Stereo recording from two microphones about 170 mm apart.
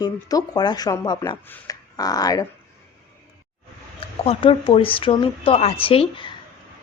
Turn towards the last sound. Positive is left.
turn(degrees=30)  # may be behind; listen again after turning